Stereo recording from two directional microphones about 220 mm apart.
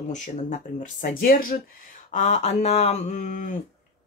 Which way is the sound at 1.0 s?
40° left (ahead or behind).